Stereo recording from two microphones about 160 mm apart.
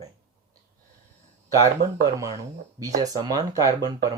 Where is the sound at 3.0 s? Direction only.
25° right (ahead or behind).